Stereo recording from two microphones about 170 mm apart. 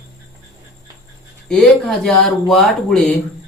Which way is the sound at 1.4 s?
5° left (ahead or behind).